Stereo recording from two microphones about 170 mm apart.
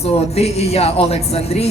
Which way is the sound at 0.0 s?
35° left (ahead or behind).